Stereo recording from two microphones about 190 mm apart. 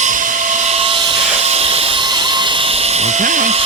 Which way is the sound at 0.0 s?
45° right (ahead or behind).